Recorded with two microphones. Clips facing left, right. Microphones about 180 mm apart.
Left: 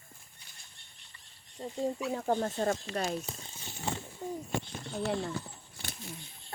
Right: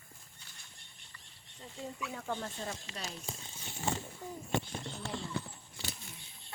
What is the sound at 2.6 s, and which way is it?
Speech, 60° left (ahead or behind).